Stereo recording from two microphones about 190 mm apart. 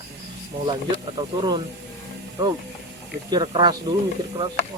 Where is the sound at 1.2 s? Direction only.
25° right (ahead or behind).